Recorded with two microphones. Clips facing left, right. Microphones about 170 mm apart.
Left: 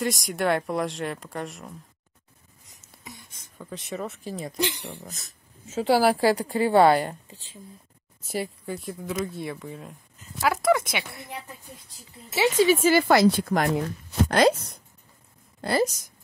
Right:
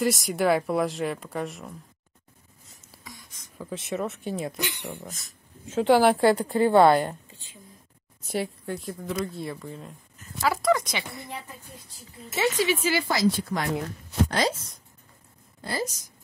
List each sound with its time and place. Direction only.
0.0 s speech: centre (ahead or behind)
3.0 s a sound: 25° left (ahead or behind)
3.5 s speech: centre (ahead or behind)
4.6 s speech: 40° left (ahead or behind)
5.7 s speech: 5° left (ahead or behind)
7.2 s speech: 35° left (ahead or behind)
8.3 s speech: centre (ahead or behind)
12.6 s a woman's voice: 50° left (ahead or behind); by 15.9 s 70° left (ahead or behind)